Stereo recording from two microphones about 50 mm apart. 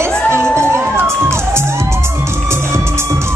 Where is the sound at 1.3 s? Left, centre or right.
Right.